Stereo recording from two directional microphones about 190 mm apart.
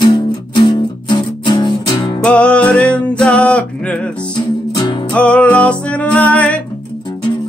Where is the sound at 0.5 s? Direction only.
25° left (ahead or behind).